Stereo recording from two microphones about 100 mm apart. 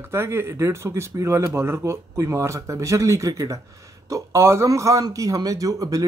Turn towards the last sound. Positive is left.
turn(degrees=-35)  # may be behind; listen again after turning